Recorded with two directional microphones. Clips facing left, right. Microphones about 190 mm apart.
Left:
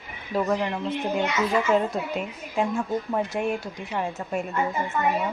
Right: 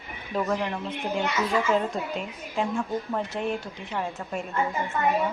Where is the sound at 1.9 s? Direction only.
5° left (ahead or behind).